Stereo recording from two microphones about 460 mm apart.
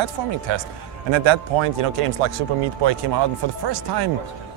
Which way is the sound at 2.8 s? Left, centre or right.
Right.